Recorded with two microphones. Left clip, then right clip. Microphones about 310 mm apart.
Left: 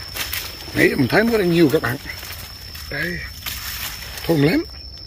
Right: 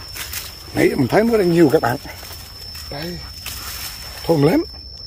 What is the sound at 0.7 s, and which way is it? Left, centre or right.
Speech, centre.